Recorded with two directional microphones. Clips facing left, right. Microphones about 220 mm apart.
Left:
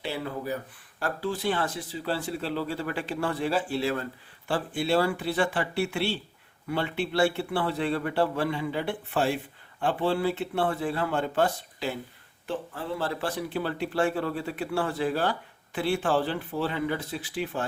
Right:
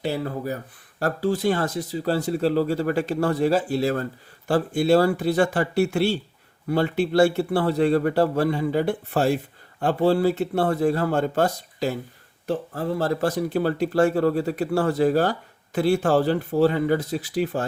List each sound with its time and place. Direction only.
0.0 s speech: 40° right (ahead or behind)